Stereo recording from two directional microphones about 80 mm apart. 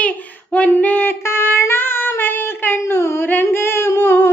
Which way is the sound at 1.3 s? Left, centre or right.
Left.